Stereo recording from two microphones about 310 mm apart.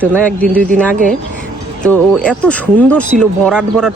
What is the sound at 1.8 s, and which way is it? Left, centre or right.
Speech, centre.